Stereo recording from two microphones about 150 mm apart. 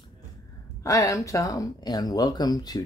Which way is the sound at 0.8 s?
20° left (ahead or behind).